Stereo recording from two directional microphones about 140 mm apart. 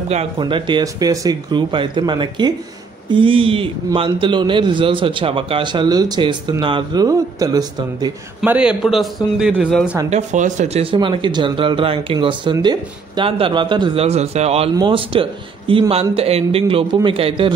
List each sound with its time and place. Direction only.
0.4 s a man's voice: 35° right (ahead or behind)
8.5 s a man's voice: 10° right (ahead or behind)
10.0 s a man's voice: 55° right (ahead or behind)
14.8 s a man's voice: 40° right (ahead or behind)